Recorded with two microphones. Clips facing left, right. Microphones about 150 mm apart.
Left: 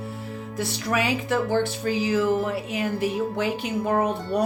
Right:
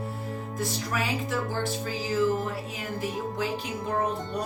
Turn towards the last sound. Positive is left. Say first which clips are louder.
# left 5 dB
turn(degrees=70)  # may be behind; listen again after turning